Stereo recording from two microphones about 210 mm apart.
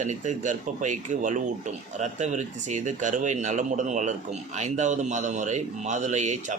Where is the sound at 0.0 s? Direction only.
35° right (ahead or behind).